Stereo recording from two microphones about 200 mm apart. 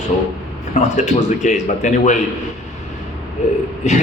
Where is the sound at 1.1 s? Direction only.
35° left (ahead or behind).